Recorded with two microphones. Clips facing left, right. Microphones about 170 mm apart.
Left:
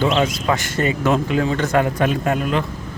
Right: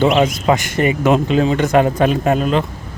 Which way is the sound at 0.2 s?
20° right (ahead or behind).